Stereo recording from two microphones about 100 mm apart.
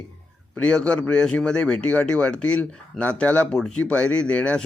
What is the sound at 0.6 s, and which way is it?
A man's voice, 10° left (ahead or behind).